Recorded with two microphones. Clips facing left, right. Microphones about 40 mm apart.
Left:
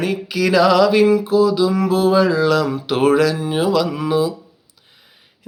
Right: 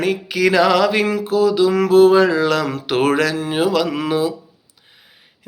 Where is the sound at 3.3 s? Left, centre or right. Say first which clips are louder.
Even; right.